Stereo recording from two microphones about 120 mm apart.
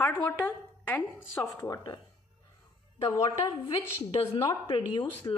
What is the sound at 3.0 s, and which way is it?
Speech, 25° left (ahead or behind).